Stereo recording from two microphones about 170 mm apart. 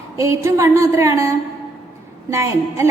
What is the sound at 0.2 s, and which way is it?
A woman's voice, 20° right (ahead or behind).